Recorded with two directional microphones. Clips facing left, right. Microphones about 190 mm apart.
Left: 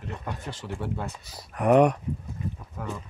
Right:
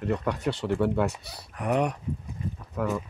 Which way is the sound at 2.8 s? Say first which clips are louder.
Right 8 dB; 65° right (ahead or behind).